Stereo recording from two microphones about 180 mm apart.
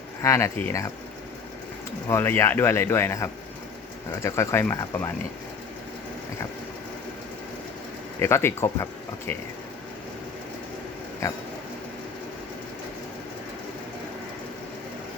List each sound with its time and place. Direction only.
0.2 s speech: 15° left (ahead or behind)
2.0 s speech: 15° left (ahead or behind)
8.2 s speech: 15° left (ahead or behind)
11.2 s speech: 15° left (ahead or behind)